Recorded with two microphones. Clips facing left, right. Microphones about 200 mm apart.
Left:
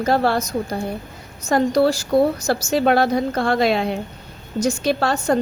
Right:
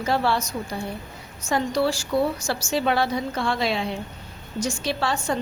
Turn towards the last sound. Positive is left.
turn(degrees=40)  # may be behind; listen again after turning